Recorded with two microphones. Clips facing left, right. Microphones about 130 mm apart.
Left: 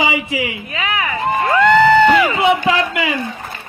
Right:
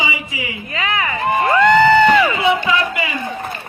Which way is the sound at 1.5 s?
Centre (ahead or behind).